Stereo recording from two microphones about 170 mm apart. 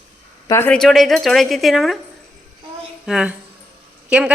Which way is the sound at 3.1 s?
5° right (ahead or behind).